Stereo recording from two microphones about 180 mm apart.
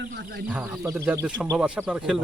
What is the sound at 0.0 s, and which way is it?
Speech, 70° right (ahead or behind).